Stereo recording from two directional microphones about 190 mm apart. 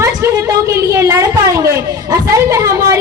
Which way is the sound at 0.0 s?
15° right (ahead or behind).